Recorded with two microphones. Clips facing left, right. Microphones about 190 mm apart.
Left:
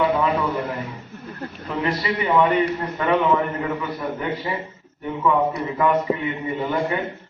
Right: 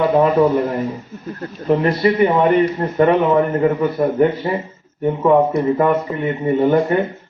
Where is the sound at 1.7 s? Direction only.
40° right (ahead or behind).